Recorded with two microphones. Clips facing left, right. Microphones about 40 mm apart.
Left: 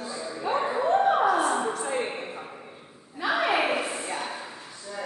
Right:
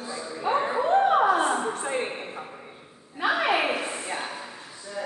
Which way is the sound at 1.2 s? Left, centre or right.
Right.